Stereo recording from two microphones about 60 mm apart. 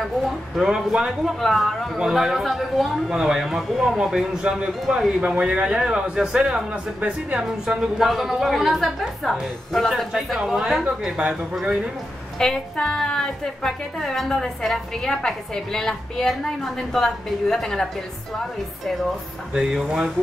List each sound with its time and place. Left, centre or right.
0.6 s a man's voice: centre
1.4 s a woman's voice: centre
4.4 s a man's voice: centre
8.1 s a woman's voice: centre
10.8 s a man's voice: centre
12.4 s a woman's voice: centre
19.5 s a man's voice: centre